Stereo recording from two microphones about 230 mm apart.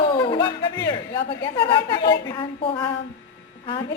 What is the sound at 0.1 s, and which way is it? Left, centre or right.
Speech, left.